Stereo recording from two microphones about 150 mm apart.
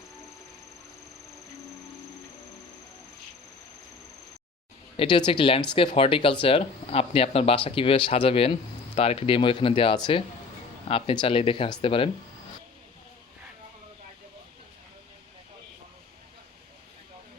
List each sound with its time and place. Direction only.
4.9 s speech: 30° left (ahead or behind)